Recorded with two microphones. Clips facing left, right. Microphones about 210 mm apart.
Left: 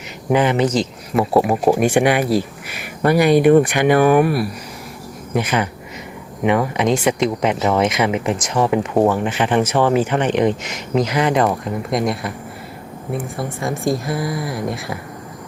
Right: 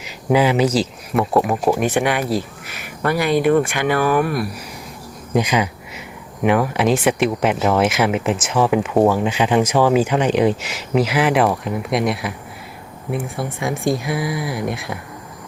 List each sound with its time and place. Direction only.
0.0 s speech: 10° right (ahead or behind)
1.2 s speech: 10° left (ahead or behind)
5.3 s speech: 15° right (ahead or behind)
6.4 s speech: centre (ahead or behind)